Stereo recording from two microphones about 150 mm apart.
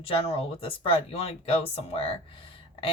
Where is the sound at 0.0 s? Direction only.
40° left (ahead or behind).